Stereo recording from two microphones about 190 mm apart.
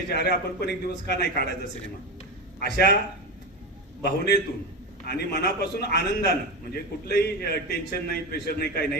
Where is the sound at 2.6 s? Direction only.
60° left (ahead or behind).